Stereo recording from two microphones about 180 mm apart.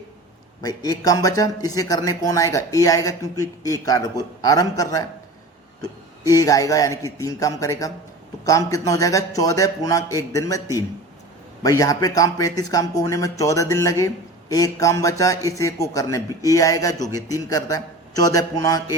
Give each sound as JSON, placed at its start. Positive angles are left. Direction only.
{"t": 0.6, "sound": "a man's voice", "side_deg": 20}
{"t": 11.8, "sound": "a man's voice", "side_deg": 20}